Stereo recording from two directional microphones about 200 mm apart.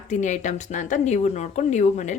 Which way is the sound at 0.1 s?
35° left (ahead or behind).